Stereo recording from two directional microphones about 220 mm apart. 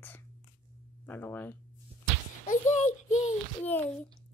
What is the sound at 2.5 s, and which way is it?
Speech, 35° left (ahead or behind).